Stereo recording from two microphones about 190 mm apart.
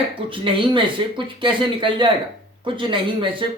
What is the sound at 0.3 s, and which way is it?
Speech, 25° right (ahead or behind).